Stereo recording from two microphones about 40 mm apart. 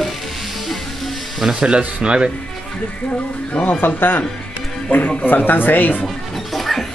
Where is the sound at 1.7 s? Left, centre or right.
Right.